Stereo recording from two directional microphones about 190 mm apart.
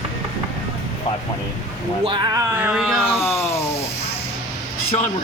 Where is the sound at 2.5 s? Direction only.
10° right (ahead or behind).